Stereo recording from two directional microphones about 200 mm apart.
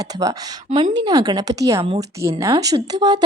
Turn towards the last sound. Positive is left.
turn(degrees=-20)  # may be behind; listen again after turning